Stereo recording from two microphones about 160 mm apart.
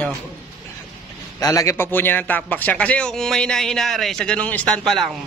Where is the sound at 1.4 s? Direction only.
20° left (ahead or behind).